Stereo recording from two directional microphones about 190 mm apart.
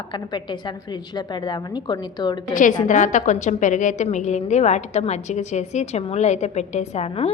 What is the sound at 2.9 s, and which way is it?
A woman's voice, 40° left (ahead or behind).